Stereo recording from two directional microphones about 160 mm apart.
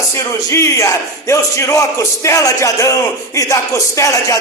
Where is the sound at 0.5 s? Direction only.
20° left (ahead or behind).